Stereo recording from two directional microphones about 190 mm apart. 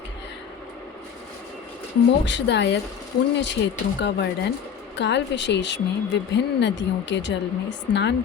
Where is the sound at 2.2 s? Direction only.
70° left (ahead or behind).